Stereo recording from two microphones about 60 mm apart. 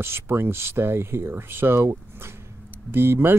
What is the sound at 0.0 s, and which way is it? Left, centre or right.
Speech, right.